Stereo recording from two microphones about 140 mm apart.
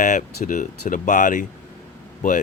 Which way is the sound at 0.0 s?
60° left (ahead or behind).